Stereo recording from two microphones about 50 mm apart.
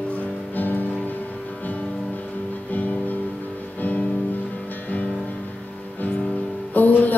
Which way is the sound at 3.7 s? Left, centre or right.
Left.